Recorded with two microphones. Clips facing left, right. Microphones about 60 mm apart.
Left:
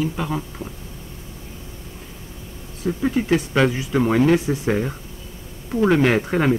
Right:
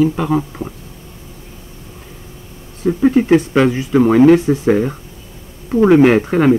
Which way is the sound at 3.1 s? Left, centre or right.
Right.